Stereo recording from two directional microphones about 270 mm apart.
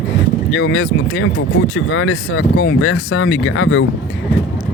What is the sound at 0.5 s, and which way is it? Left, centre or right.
Speech, left.